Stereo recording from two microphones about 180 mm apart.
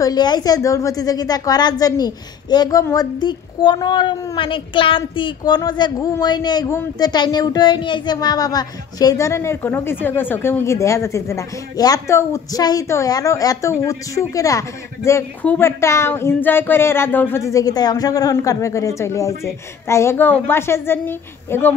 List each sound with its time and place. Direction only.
0.0 s a woman's voice: 25° left (ahead or behind)